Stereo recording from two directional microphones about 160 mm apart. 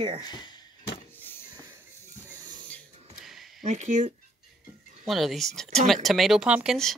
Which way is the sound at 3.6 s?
50° right (ahead or behind).